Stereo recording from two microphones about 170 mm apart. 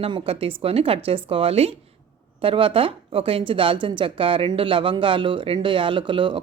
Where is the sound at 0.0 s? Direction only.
35° right (ahead or behind).